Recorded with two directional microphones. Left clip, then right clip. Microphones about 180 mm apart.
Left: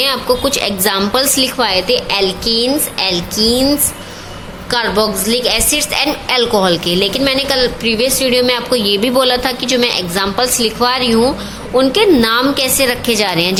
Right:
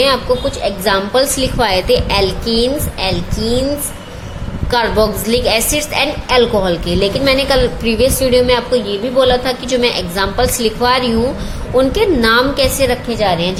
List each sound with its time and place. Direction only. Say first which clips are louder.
0.0 s a woman's voice: right 1 dB; 10° left (ahead or behind)
4.7 s a woman's voice: right 1 dB; centre (ahead or behind)
8.8 s a woman's voice: left 1 dB; 25° left (ahead or behind)
13.1 s a woman's voice: left 1 dB; 25° left (ahead or behind)